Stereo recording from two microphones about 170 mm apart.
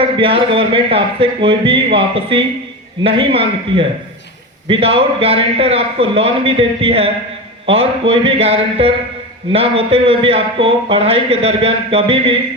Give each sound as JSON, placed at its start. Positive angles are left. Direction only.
{"t": 0.0, "sound": "a man's voice", "side_deg": -30}